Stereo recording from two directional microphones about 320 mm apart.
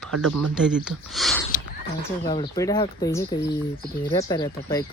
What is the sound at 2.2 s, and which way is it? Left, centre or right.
Speech, centre.